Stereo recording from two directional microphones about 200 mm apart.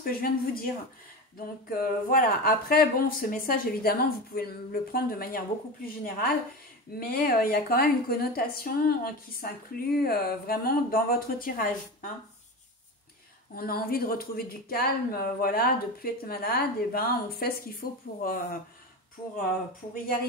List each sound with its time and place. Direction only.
0.0 s speech: 45° left (ahead or behind)
1.7 s speech: 45° left (ahead or behind)
13.6 s speech: 50° left (ahead or behind)